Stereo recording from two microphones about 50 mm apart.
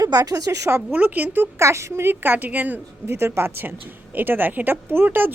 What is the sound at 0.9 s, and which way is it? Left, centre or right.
Speech, right.